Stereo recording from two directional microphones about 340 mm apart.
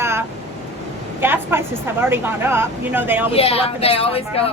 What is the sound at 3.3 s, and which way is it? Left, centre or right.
A woman's voice, centre.